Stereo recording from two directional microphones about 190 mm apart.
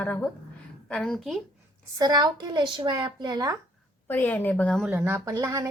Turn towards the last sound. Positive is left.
turn(degrees=-15)  # may be behind; listen again after turning